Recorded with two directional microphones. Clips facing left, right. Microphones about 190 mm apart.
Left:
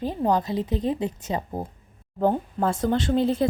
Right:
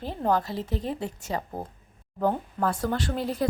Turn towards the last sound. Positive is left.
turn(degrees=25)  # may be behind; listen again after turning